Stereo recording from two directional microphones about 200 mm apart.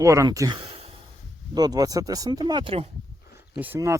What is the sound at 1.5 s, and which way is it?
Speech, 20° right (ahead or behind).